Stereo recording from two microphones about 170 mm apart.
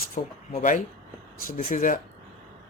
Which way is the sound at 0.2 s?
50° left (ahead or behind).